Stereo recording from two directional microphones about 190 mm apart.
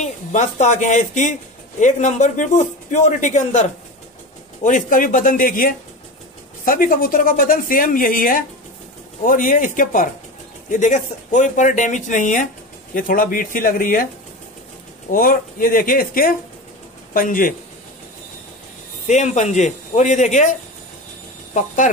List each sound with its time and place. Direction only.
0.0 s a man's voice: 40° left (ahead or behind)
4.6 s a man's voice: 45° left (ahead or behind)
15.0 s speech: 45° left (ahead or behind)
19.0 s a man's voice: 35° left (ahead or behind)
21.5 s a man's voice: 40° left (ahead or behind)